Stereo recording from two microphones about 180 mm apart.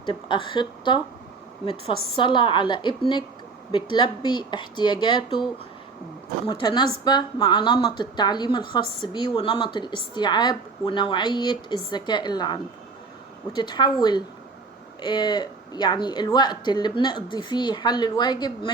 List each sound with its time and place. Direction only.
0.0 s speech: 25° left (ahead or behind)
2.1 s speech: 25° left (ahead or behind)
6.5 s speech: 25° left (ahead or behind)